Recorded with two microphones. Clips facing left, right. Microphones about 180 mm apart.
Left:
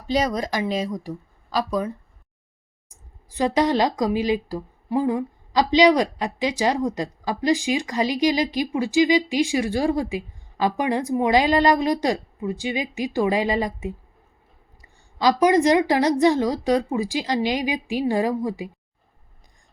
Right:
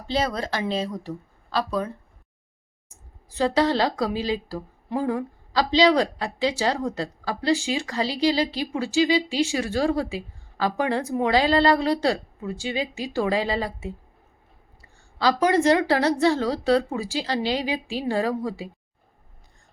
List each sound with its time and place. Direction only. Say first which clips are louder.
0.1 s a woman's voice: left 3 dB; 15° left (ahead or behind)
3.3 s a woman's voice: left 1 dB; 15° left (ahead or behind)